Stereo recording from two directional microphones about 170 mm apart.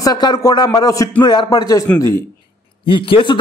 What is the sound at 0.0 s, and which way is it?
A man's voice, 25° left (ahead or behind).